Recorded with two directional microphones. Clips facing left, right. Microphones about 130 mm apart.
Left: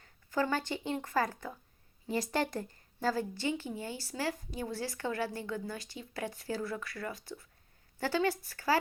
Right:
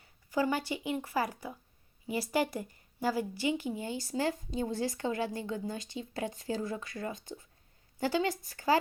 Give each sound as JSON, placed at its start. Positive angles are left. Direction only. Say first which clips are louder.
{"t": 0.0, "sound": "a woman's voice", "louder": "right 2 dB", "side_deg": -15}